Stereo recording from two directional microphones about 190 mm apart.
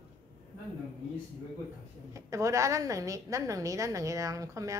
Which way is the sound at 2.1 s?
15° right (ahead or behind).